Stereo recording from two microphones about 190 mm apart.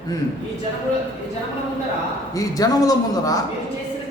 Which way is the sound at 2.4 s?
20° left (ahead or behind).